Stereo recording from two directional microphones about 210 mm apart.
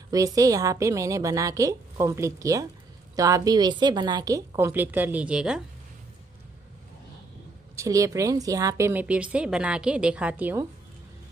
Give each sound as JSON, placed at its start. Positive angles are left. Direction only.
{"t": 0.1, "sound": "a woman's voice", "side_deg": -15}
{"t": 7.7, "sound": "a woman's voice", "side_deg": -15}